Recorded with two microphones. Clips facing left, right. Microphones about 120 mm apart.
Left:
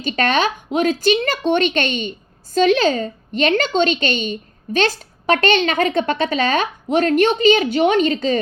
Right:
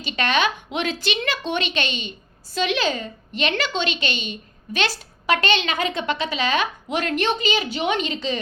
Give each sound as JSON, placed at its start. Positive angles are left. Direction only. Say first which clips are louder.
{"t": 0.0, "sound": "a woman's voice", "louder": "left 4 dB", "side_deg": 45}